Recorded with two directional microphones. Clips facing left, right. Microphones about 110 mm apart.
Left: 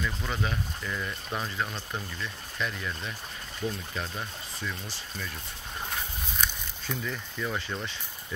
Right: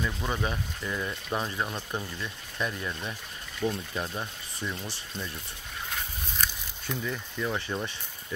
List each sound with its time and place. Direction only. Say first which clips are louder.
0.0 s speech: right 2 dB; 15° right (ahead or behind)
6.3 s a sound: even; centre (ahead or behind)
7.1 s speech: right 3 dB; 5° right (ahead or behind)